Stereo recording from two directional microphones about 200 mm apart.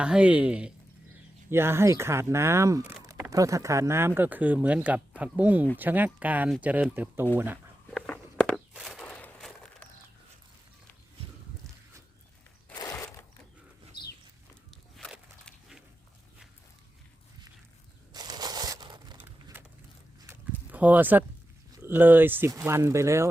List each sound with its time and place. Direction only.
0.0 s speech: 5° right (ahead or behind)
7.9 s walk: 5° left (ahead or behind)
12.7 s a sound: 15° left (ahead or behind)
14.9 s walk: centre (ahead or behind)
18.1 s crumpling: 20° right (ahead or behind)
20.2 s a sound: 10° right (ahead or behind)
21.8 s speech: 10° right (ahead or behind)